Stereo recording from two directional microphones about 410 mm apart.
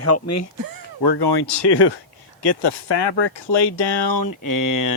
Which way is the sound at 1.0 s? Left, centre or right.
Left.